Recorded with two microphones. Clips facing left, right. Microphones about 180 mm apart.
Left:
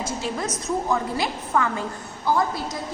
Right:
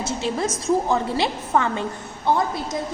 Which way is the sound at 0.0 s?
25° right (ahead or behind).